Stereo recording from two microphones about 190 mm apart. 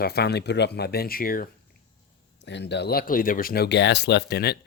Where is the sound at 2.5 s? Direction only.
65° left (ahead or behind).